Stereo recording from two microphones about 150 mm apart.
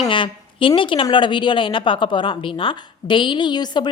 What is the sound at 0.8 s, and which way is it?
A woman's voice, 35° left (ahead or behind).